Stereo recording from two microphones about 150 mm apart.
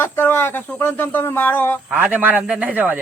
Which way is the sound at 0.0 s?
15° left (ahead or behind).